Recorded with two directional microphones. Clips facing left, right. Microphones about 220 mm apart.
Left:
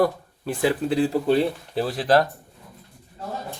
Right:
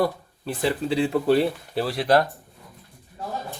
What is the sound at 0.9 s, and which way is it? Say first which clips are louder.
Speech: left 2 dB; 45° left (ahead or behind).